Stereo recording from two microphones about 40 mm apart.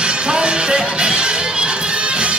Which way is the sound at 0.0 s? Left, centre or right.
Right.